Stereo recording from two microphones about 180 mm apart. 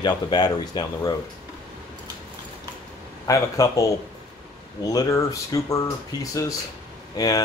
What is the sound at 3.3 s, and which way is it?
A man's voice, 20° left (ahead or behind).